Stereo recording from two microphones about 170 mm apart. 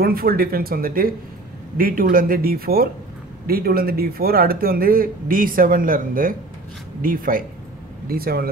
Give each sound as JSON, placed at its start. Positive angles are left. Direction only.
{"t": 0.0, "sound": "speech", "side_deg": -60}